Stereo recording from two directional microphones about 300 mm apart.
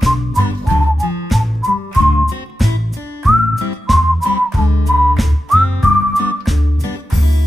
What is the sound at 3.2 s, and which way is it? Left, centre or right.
Music, centre.